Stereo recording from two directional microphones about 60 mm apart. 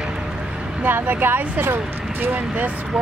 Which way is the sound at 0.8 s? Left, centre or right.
Right.